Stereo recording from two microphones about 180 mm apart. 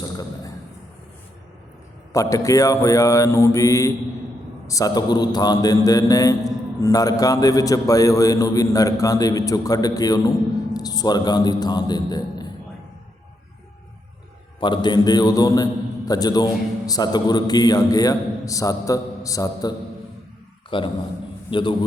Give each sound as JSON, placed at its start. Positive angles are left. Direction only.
{"t": 2.1, "sound": "mantra", "side_deg": 15}
{"t": 4.6, "sound": "a man's voice", "side_deg": 20}
{"t": 14.6, "sound": "a man's voice", "side_deg": 25}